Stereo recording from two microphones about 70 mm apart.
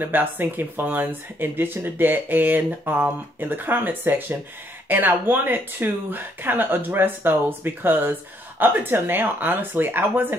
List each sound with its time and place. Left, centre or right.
0.0 s speech: right